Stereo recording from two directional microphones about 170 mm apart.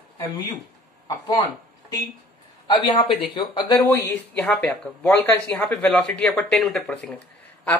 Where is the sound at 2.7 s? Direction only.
25° left (ahead or behind).